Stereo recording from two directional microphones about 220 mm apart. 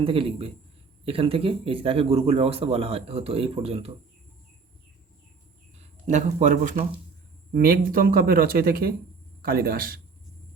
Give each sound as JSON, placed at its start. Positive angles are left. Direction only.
{"t": 0.0, "sound": "speech", "side_deg": -25}
{"t": 5.8, "sound": "speech", "side_deg": -30}